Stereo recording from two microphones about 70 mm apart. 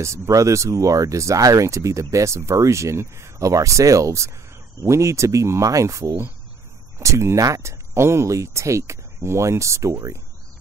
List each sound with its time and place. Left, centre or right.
0.0 s speech: right